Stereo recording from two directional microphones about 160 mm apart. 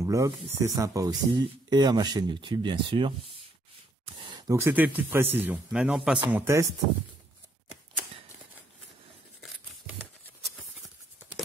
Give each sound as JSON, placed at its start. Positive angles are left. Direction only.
{"t": 0.0, "sound": "speech", "side_deg": -20}
{"t": 6.3, "sound": "speech", "side_deg": -15}